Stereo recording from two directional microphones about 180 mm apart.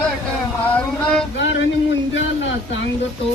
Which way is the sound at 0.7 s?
5° left (ahead or behind).